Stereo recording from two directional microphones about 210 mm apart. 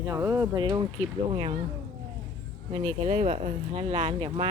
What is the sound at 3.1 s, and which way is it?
Speech, 30° right (ahead or behind).